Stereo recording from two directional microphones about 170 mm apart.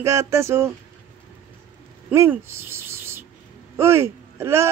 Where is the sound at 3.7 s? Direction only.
15° right (ahead or behind).